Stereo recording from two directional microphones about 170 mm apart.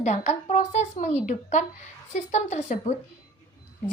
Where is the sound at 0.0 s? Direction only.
45° left (ahead or behind).